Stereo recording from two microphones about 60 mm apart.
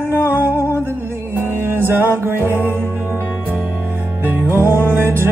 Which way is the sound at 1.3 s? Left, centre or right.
Right.